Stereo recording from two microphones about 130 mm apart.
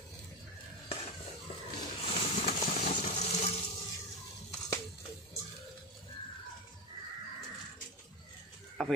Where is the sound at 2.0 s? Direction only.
55° left (ahead or behind).